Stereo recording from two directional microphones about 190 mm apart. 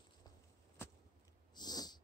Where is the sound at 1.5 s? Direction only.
20° left (ahead or behind).